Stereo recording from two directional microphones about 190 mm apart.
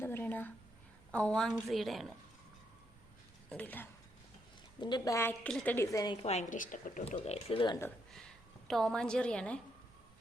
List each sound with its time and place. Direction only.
0.0 s a sound: 10° left (ahead or behind)
1.1 s a woman's voice: 5° left (ahead or behind)
3.5 s a woman's voice: 10° left (ahead or behind)
4.8 s a woman's voice: 20° left (ahead or behind)
6.2 s speech: 40° left (ahead or behind)
7.8 s a woman's voice: 10° left (ahead or behind)